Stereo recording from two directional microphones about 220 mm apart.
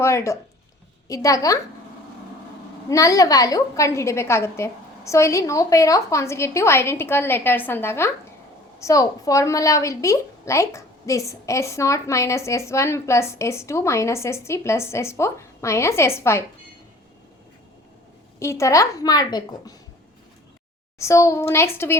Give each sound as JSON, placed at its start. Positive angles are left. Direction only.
{"t": 0.0, "sound": "a woman's voice", "side_deg": 10}
{"t": 2.9, "sound": "a woman's voice", "side_deg": 15}
{"t": 18.3, "sound": "a woman's voice", "side_deg": 15}
{"t": 21.0, "sound": "a woman's voice", "side_deg": 15}